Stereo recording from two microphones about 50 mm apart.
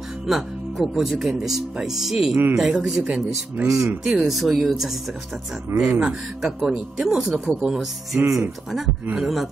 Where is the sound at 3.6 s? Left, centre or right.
Right.